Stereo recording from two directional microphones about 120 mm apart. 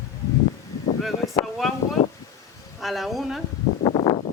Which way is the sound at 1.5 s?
Centre (ahead or behind).